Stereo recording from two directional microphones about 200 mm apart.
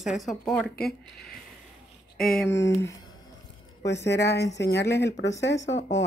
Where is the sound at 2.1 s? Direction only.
Centre (ahead or behind).